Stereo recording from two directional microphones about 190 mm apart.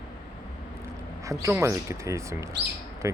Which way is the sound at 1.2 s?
15° right (ahead or behind).